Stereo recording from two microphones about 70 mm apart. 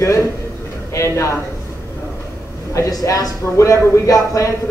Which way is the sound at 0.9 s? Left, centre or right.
Left.